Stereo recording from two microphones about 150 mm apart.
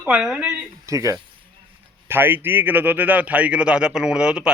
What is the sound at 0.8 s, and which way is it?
A man's voice, 20° right (ahead or behind).